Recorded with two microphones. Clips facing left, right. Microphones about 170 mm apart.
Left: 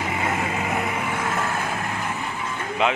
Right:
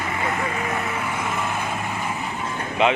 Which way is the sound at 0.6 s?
15° left (ahead or behind).